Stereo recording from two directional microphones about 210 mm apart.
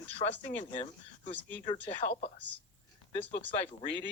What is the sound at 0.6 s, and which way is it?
Speech, 35° left (ahead or behind).